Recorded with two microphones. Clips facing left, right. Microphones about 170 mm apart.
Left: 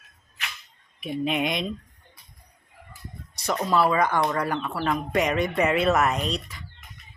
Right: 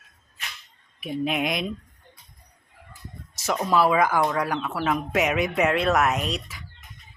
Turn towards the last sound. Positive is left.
turn(degrees=-5)  # may be behind; listen again after turning